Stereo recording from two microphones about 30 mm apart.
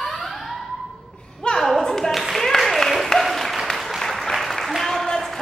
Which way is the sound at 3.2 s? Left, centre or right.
Centre.